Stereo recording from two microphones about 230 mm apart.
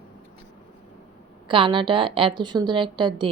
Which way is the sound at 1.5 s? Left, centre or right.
Right.